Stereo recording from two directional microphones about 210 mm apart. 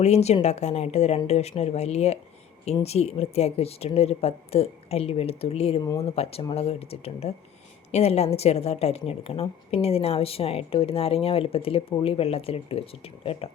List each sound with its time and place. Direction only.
0.0 s a woman's voice: 30° left (ahead or behind)